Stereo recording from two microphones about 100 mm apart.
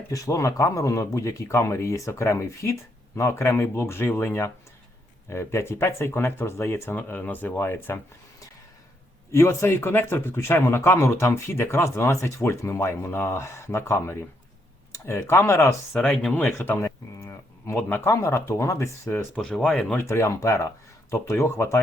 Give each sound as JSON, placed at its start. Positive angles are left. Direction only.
{"t": 0.1, "sound": "speech", "side_deg": 35}
{"t": 9.3, "sound": "speech", "side_deg": 30}
{"t": 15.9, "sound": "speech", "side_deg": 10}
{"t": 17.2, "sound": "a sound", "side_deg": 30}
{"t": 17.7, "sound": "speech", "side_deg": 20}
{"t": 19.4, "sound": "speech", "side_deg": 5}
{"t": 20.1, "sound": "speech", "side_deg": 30}